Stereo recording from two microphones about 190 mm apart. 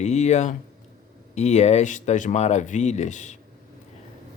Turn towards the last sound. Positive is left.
turn(degrees=40)  # may be behind; listen again after turning